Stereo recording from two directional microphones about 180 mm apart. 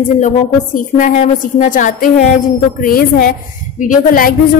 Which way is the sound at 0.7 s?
45° left (ahead or behind).